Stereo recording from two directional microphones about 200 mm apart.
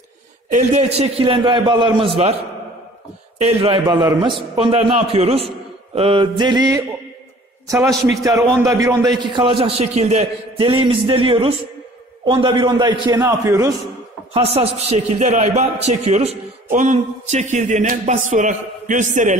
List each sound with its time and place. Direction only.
0.5 s a man's voice: 35° right (ahead or behind)
3.3 s a man's voice: 30° right (ahead or behind)
14.3 s a man's voice: 30° right (ahead or behind)